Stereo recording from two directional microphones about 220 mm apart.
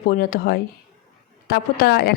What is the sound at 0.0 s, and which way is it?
A woman's voice, 45° left (ahead or behind).